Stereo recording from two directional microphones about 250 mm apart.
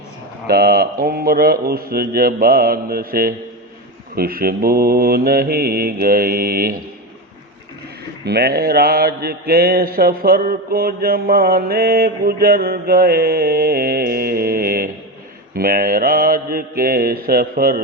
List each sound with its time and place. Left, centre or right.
0.4 s mantra: right
8.2 s mantra: right